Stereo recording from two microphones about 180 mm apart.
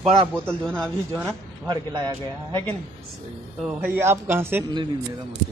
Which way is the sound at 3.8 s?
10° right (ahead or behind).